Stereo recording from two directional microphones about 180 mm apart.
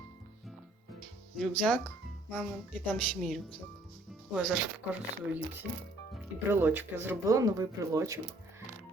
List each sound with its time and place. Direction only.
1.4 s speech: 5° left (ahead or behind)
6.5 s speech: 10° right (ahead or behind)